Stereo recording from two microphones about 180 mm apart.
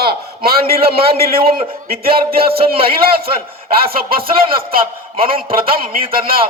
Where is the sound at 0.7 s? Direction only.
60° right (ahead or behind).